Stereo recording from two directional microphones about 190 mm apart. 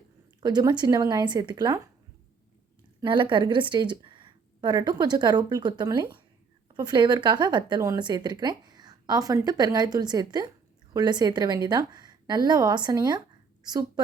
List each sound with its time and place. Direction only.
0.4 s speech: 20° right (ahead or behind)
3.0 s speech: 25° right (ahead or behind)